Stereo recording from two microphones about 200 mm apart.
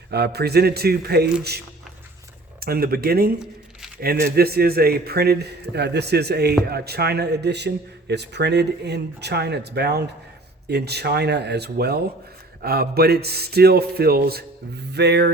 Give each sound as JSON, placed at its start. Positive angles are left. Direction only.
{"t": 0.1, "sound": "speech", "side_deg": -55}
{"t": 2.6, "sound": "speech", "side_deg": -50}